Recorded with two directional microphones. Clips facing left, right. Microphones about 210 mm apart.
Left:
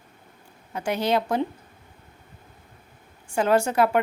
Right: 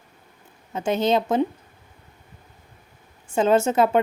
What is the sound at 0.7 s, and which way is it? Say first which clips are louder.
Speech: right 3 dB; 25° right (ahead or behind).